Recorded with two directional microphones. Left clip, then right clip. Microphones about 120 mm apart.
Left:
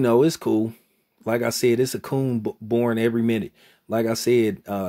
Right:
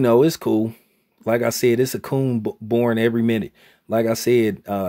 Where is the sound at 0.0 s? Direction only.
25° right (ahead or behind).